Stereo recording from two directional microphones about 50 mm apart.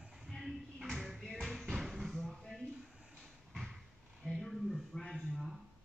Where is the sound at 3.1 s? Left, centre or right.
Centre.